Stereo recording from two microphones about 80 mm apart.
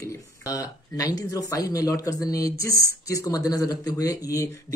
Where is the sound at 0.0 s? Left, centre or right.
Left.